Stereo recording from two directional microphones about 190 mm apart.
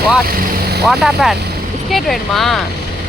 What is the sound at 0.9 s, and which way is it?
Speech, centre (ahead or behind).